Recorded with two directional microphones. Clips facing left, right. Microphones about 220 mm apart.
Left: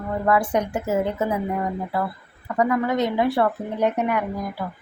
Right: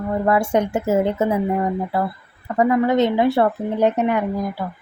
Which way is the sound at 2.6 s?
25° right (ahead or behind).